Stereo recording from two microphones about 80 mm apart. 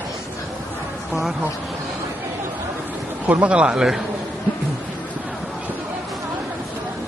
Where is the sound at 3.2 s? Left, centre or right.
Centre.